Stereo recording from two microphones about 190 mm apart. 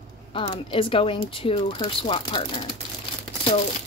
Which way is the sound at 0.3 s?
30° left (ahead or behind).